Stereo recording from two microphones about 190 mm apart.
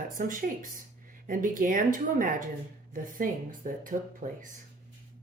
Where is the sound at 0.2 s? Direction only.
45° right (ahead or behind).